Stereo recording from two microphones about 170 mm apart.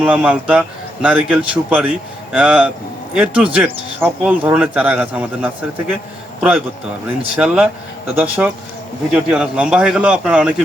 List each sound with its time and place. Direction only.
0.0 s speech: 10° right (ahead or behind)
7.3 s a man's voice: 5° right (ahead or behind)